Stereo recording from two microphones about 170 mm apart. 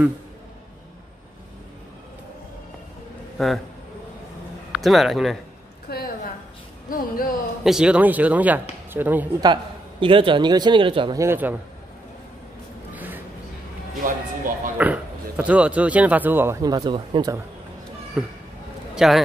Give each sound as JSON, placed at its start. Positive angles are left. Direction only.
{"t": 3.3, "sound": "a man's voice", "side_deg": 0}
{"t": 4.7, "sound": "a man's voice", "side_deg": 0}
{"t": 5.9, "sound": "a sound", "side_deg": 60}
{"t": 6.9, "sound": "speech", "side_deg": 55}
{"t": 7.6, "sound": "speech", "side_deg": -5}
{"t": 9.4, "sound": "a man's voice", "side_deg": -30}
{"t": 11.1, "sound": "speech", "side_deg": -15}
{"t": 12.9, "sound": "music", "side_deg": -10}
{"t": 14.0, "sound": "music", "side_deg": -55}
{"t": 14.8, "sound": "speech", "side_deg": -10}
{"t": 18.2, "sound": "a man's voice", "side_deg": -5}